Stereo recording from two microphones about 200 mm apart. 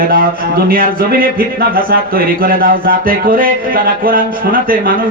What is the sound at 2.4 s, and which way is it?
A man's voice, 45° right (ahead or behind).